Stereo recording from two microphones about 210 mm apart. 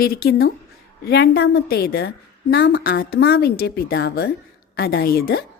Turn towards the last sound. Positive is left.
turn(degrees=50)  # may be behind; listen again after turning